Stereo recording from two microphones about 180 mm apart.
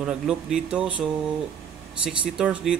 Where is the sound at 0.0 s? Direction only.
5° right (ahead or behind).